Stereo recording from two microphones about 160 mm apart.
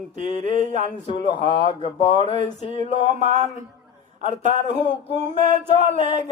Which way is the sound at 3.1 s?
50° right (ahead or behind).